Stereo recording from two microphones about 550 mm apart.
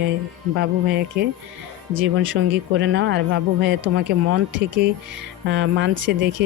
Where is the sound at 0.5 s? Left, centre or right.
Centre.